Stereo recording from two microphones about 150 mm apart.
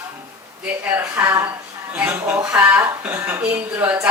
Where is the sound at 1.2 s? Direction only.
15° right (ahead or behind).